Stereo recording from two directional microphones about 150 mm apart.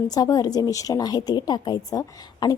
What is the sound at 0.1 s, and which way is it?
A woman's voice, 25° left (ahead or behind).